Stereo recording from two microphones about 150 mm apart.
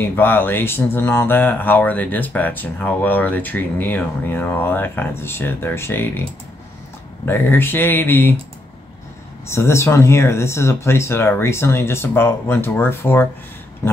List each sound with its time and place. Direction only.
0.0 s speech: 15° left (ahead or behind)
7.2 s speech: 15° left (ahead or behind)
9.5 s speech: 15° left (ahead or behind)